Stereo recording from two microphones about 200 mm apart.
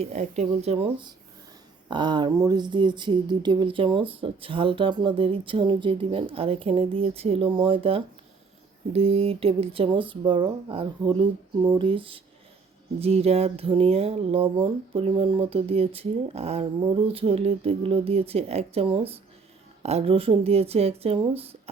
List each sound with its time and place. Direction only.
0.0 s speech: 35° right (ahead or behind)